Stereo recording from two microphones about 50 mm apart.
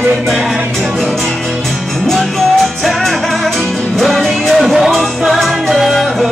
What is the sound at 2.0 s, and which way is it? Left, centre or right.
Music, centre.